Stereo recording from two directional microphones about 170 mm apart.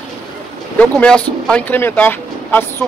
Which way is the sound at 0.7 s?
5° left (ahead or behind).